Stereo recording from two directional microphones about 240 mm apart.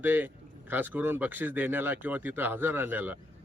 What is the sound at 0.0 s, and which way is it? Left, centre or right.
Speech, centre.